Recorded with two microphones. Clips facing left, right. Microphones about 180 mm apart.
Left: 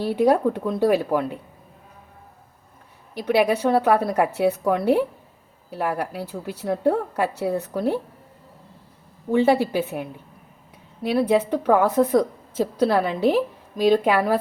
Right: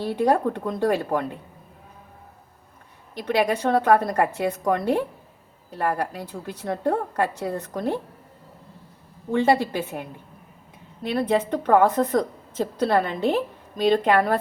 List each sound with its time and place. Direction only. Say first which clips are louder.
0.0 s a woman's voice: left 3 dB; 10° left (ahead or behind)
3.2 s a woman's voice: left 3 dB; 10° left (ahead or behind)
9.3 s a woman's voice: left 2 dB; 10° left (ahead or behind)
11.0 s a woman's voice: left 3 dB; 10° left (ahead or behind)